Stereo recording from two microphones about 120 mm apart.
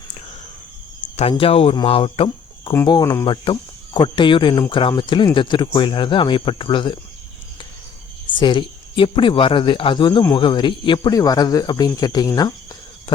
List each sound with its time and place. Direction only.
1.3 s speech: 50° left (ahead or behind)
2.8 s speech: 35° left (ahead or behind)
3.2 s speech: 40° left (ahead or behind)
8.3 s speech: 40° left (ahead or behind)